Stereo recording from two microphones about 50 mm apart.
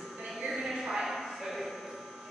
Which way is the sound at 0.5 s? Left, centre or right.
Centre.